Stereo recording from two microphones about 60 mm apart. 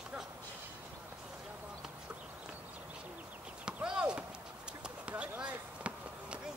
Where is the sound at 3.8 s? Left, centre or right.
Centre.